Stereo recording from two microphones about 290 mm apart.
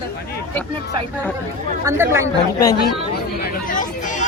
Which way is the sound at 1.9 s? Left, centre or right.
Centre.